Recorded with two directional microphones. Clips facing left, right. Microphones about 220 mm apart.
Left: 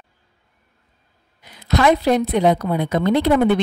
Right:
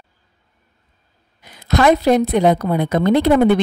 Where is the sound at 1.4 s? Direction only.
45° right (ahead or behind).